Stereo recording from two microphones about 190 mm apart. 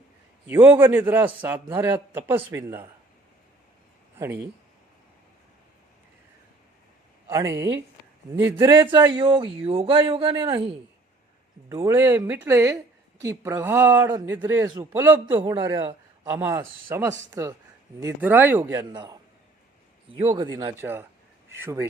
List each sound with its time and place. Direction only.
0.4 s a man's voice: 10° right (ahead or behind)
7.3 s a man's voice: 20° right (ahead or behind)
8.7 s a man's voice: 25° right (ahead or behind)
20.2 s a man's voice: 20° right (ahead or behind)